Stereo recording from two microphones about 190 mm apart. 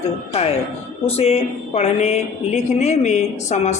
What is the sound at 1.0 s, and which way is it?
Speech, 30° left (ahead or behind).